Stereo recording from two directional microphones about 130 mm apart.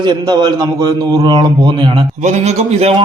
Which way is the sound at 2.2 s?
60° right (ahead or behind).